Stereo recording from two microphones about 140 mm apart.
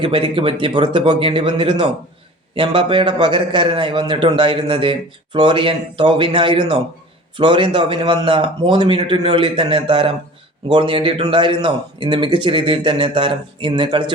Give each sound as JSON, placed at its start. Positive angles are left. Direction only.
{"t": 0.0, "sound": "a man's voice", "side_deg": -40}